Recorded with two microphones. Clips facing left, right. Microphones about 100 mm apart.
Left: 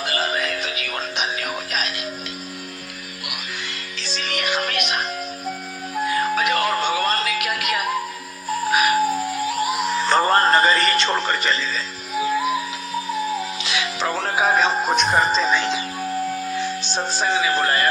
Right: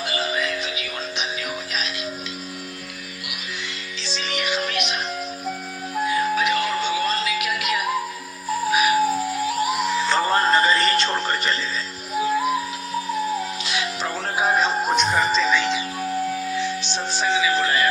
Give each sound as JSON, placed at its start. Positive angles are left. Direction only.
{"t": 0.0, "sound": "music", "side_deg": 55}
{"t": 4.0, "sound": "music", "side_deg": 50}
{"t": 6.1, "sound": "music", "side_deg": 55}
{"t": 10.0, "sound": "music", "side_deg": 50}
{"t": 13.7, "sound": "music", "side_deg": 90}
{"t": 15.1, "sound": "music", "side_deg": 40}
{"t": 16.0, "sound": "music", "side_deg": 0}
{"t": 16.6, "sound": "music", "side_deg": 40}